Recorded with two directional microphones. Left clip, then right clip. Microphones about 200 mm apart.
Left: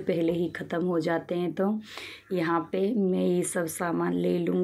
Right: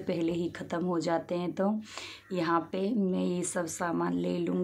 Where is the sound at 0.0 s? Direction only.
Centre (ahead or behind).